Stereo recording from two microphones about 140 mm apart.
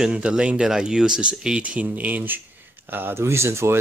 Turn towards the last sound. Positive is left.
turn(degrees=-20)  # may be behind; listen again after turning